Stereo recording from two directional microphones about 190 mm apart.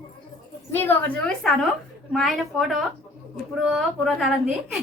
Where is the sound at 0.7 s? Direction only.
10° left (ahead or behind).